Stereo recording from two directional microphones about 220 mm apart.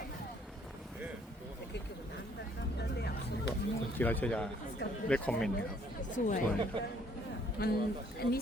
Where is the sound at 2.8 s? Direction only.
50° left (ahead or behind).